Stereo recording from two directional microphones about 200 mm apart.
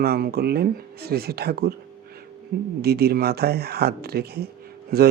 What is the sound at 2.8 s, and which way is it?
Speech, 50° right (ahead or behind).